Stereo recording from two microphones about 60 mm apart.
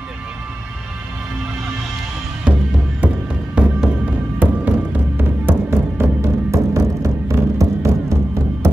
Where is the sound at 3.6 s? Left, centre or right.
Centre; by 6.1 s right.